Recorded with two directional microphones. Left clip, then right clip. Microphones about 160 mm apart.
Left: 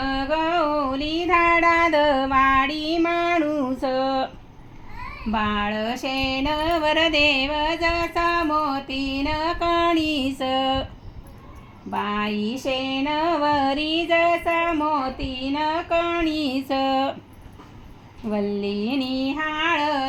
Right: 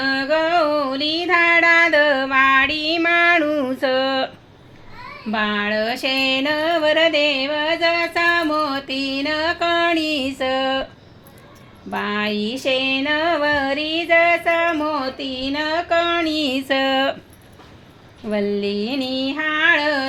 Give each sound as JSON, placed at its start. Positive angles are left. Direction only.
{"t": 0.0, "sound": "female singing", "side_deg": -30}
{"t": 3.8, "sound": "a sound", "side_deg": -15}
{"t": 5.3, "sound": "female singing", "side_deg": -30}
{"t": 6.0, "sound": "music", "side_deg": -30}
{"t": 11.9, "sound": "female singing", "side_deg": -30}
{"t": 18.3, "sound": "female singing", "side_deg": -20}